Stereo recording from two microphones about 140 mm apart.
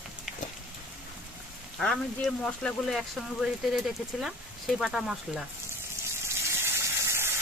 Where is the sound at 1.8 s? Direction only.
5° left (ahead or behind).